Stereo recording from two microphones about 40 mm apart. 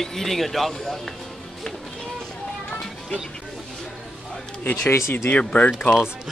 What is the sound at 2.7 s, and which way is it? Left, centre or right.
Music, centre.